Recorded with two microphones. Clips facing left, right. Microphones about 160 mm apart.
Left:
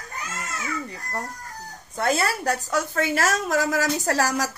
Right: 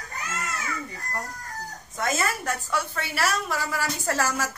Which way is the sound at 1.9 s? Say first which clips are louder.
Left 4 dB; 35° left (ahead or behind).